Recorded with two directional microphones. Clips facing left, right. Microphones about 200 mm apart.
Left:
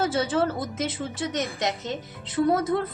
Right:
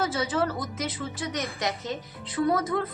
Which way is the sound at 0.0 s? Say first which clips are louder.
Left 3 dB; 30° left (ahead or behind).